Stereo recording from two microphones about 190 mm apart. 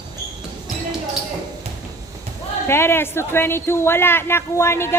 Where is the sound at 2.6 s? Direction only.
15° left (ahead or behind).